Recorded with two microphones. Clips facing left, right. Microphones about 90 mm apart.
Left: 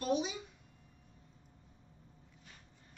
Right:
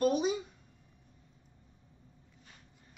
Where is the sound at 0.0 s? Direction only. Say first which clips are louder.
Right 6 dB; 45° right (ahead or behind).